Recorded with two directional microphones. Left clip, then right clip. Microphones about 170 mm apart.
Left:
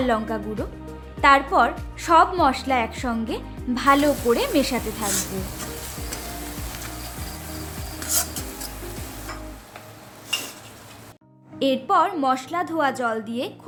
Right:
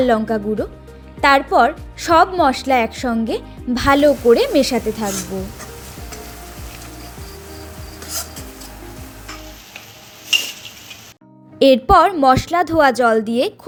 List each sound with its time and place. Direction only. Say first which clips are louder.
0.0 s speech: right 7 dB; 30° right (ahead or behind)
11.6 s a woman's voice: right 9 dB; 45° right (ahead or behind)